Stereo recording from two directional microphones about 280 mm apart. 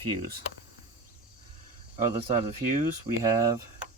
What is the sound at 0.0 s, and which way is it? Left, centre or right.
Speech, centre.